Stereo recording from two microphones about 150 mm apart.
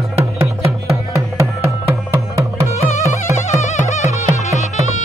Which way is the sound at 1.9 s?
20° right (ahead or behind).